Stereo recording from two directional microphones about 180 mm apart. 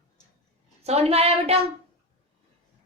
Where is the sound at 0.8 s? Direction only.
35° right (ahead or behind).